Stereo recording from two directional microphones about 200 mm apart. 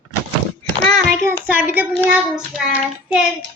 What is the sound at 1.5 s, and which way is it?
Child singing, 10° right (ahead or behind).